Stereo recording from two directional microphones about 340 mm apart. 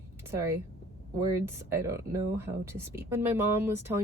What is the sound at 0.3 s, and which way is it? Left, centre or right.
Speech, centre.